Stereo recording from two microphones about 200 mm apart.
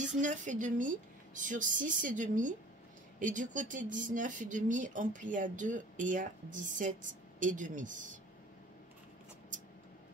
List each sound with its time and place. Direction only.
0.2 s speech: 40° right (ahead or behind)